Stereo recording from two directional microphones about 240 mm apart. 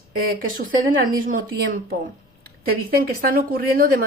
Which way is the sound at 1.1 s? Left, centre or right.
Right.